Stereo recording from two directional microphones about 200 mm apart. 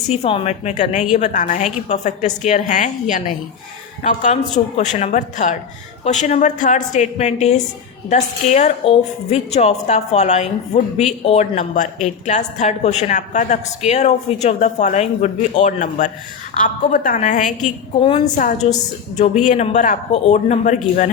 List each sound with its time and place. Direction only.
0.1 s a woman's voice: 30° left (ahead or behind)